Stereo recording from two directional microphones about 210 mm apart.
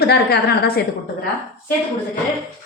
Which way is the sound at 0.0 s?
50° left (ahead or behind).